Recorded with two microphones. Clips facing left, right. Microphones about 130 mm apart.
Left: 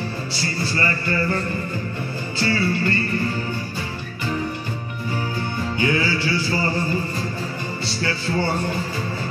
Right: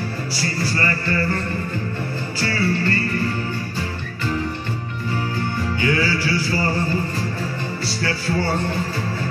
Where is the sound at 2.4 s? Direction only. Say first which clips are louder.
Even; 25° left (ahead or behind).